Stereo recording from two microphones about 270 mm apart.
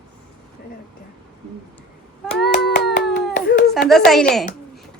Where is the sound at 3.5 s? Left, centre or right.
Left.